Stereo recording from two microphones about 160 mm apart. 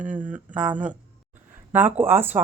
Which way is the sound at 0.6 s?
10° right (ahead or behind).